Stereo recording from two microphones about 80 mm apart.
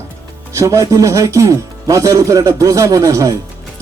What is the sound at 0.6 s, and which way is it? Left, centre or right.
A man's voice, right.